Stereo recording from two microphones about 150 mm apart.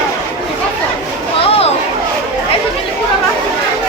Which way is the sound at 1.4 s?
40° left (ahead or behind).